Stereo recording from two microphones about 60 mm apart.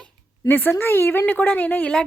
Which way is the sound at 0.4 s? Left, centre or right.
Left.